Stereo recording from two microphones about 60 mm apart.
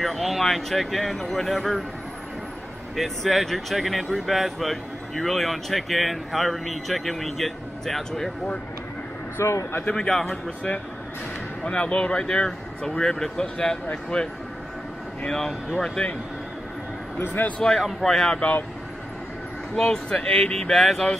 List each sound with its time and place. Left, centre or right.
0.0 s speech: centre
3.0 s speech: centre
9.4 s a man's voice: left
9.9 s speech: centre
11.6 s speech: centre
17.2 s speech: left
17.6 s speech: centre
19.7 s speech: centre
20.7 s speech: centre